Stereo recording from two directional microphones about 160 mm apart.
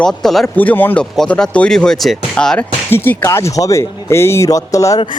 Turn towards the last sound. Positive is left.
turn(degrees=20)  # may be behind; listen again after turning